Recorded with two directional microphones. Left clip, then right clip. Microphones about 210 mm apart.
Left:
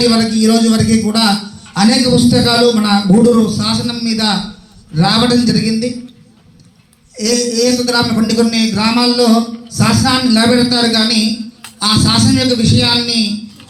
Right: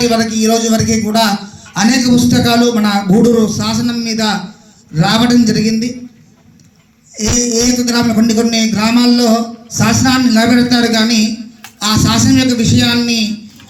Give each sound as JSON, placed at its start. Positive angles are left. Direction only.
{"t": 0.0, "sound": "a man's voice", "side_deg": -50}
{"t": 7.2, "sound": "a man's voice", "side_deg": -50}